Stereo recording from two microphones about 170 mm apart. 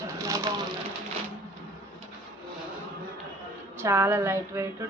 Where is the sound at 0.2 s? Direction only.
20° right (ahead or behind).